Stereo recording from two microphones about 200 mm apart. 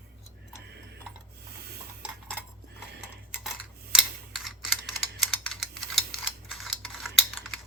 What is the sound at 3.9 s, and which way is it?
Computer keyboard, 5° right (ahead or behind).